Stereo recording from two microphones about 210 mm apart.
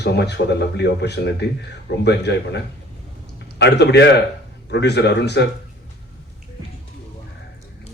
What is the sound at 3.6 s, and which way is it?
Speech, 55° left (ahead or behind).